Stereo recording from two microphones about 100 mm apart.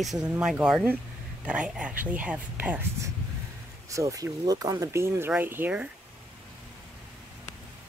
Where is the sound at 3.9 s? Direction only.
35° right (ahead or behind); by 5.8 s 15° right (ahead or behind).